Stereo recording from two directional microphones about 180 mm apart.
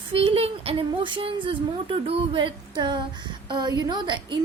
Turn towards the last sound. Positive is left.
turn(degrees=-25)  # may be behind; listen again after turning